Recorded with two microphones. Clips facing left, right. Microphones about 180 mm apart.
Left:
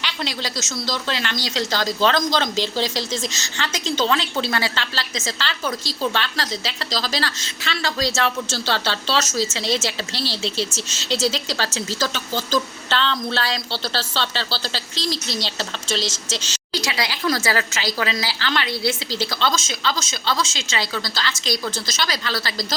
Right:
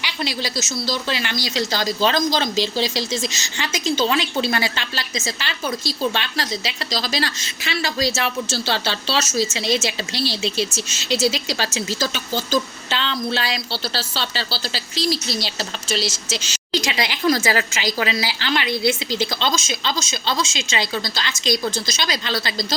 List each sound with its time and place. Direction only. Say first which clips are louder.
0.0 s a woman's voice: right 2 dB; 10° right (ahead or behind)
16.7 s a woman's voice: right 2 dB; 20° right (ahead or behind)